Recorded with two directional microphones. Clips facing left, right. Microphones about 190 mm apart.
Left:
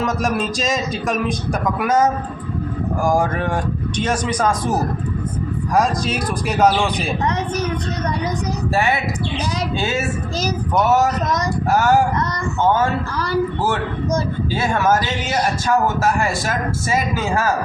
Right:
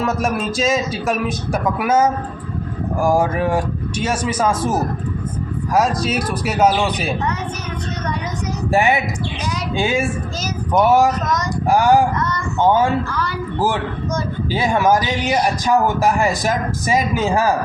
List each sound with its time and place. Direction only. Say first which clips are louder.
0.0 s a man's voice: even; centre (ahead or behind)
3.1 s speech: right 3 dB; 5° right (ahead or behind)
5.7 s speech: right 1 dB; 5° right (ahead or behind)
8.7 s a man's voice: right 4 dB; 15° right (ahead or behind)
12.1 s a sound: even; 35° left (ahead or behind)
12.5 s a man's voice: right 2 dB; 15° right (ahead or behind)
14.5 s a man's voice: right 2 dB; 15° right (ahead or behind)